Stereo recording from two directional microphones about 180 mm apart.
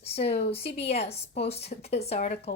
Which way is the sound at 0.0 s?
35° left (ahead or behind).